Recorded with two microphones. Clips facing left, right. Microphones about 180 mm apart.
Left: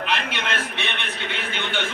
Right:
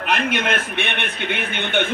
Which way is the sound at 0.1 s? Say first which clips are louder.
Right 8 dB; 50° right (ahead or behind).